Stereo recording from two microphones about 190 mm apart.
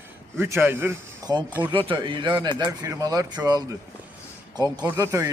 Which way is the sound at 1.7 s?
25° right (ahead or behind).